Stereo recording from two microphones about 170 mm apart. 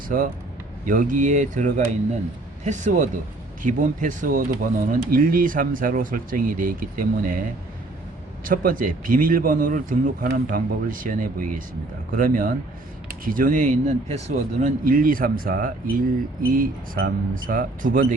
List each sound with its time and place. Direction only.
0.1 s speech: 60° right (ahead or behind)
8.4 s speech: 55° right (ahead or behind)
14.8 s speech: 55° right (ahead or behind)